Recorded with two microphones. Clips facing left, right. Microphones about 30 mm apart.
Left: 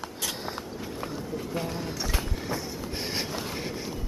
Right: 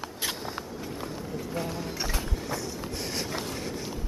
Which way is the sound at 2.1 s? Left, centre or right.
Left.